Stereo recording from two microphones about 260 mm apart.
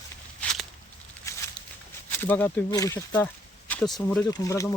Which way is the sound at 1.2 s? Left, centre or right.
Centre.